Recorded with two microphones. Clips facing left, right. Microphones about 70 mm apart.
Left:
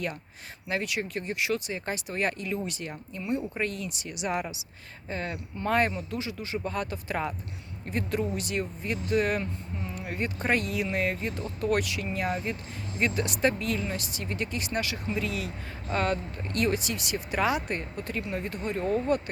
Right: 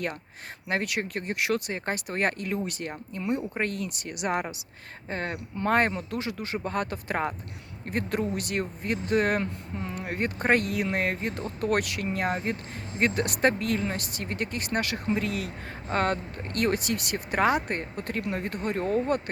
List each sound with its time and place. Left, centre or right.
0.7 s speech: right